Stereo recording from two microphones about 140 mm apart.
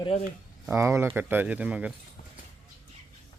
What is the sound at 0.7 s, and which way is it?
Speech, 20° right (ahead or behind).